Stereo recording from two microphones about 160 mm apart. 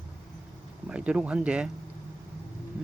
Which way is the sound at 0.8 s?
5° right (ahead or behind).